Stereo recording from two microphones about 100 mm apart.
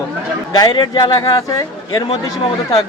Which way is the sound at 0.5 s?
45° left (ahead or behind).